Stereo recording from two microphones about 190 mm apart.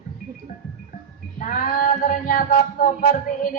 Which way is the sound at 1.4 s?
45° left (ahead or behind).